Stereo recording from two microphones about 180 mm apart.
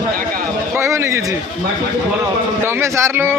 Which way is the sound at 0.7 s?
15° right (ahead or behind).